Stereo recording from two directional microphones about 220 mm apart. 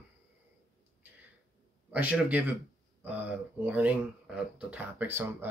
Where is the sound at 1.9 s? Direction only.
5° right (ahead or behind).